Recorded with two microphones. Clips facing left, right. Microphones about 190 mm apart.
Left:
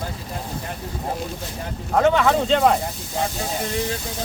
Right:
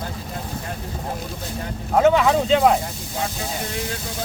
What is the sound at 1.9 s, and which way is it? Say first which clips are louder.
Speech: right 1 dB; 10° right (ahead or behind).